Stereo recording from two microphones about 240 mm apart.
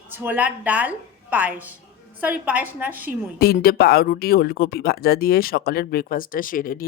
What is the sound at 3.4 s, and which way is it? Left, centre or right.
Speech, left.